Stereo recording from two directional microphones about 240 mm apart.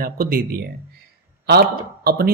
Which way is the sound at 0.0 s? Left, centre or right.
Right.